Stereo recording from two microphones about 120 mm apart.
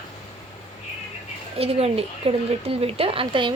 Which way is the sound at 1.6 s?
55° right (ahead or behind).